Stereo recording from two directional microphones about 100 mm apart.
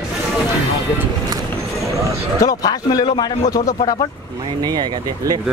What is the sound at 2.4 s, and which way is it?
Speech, 40° left (ahead or behind).